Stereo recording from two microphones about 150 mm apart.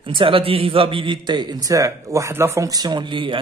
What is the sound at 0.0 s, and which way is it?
A man's voice, 35° right (ahead or behind).